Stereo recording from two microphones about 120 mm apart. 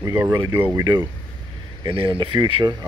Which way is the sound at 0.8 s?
35° right (ahead or behind).